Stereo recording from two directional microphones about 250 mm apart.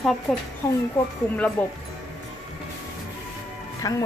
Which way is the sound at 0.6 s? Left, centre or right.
Centre.